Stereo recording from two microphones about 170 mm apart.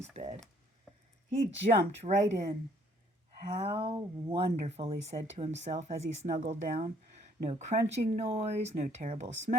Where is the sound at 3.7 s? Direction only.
25° right (ahead or behind); by 6.6 s 40° right (ahead or behind).